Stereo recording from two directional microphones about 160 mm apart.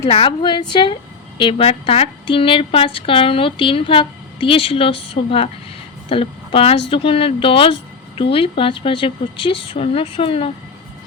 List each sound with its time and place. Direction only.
0.0 s a woman's voice: 35° left (ahead or behind)